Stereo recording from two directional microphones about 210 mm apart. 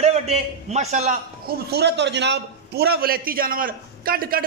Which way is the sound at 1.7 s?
55° right (ahead or behind).